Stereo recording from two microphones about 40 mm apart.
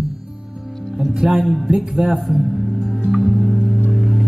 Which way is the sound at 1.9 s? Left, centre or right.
Centre.